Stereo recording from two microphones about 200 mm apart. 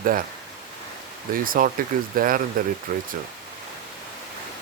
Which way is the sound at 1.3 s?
45° right (ahead or behind).